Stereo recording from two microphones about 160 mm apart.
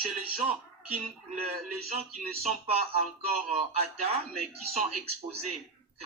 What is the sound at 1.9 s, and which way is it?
Speech, 40° right (ahead or behind).